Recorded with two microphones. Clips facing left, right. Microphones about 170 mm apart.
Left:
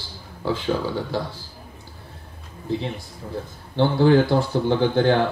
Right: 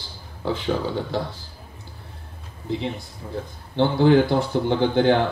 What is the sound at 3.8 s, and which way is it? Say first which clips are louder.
Speech: even; 20° right (ahead or behind).